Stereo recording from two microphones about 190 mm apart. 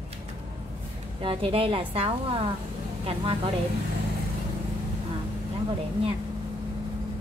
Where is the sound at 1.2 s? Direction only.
30° right (ahead or behind).